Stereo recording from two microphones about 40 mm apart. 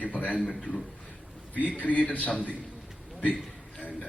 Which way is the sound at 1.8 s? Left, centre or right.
Left.